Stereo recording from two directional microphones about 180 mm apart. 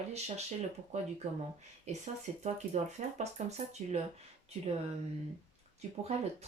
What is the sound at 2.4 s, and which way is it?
Speech, 40° right (ahead or behind).